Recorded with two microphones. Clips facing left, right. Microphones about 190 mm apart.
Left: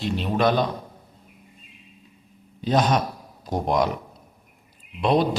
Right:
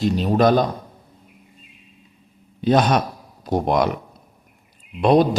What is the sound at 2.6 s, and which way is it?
A man's voice, 65° right (ahead or behind).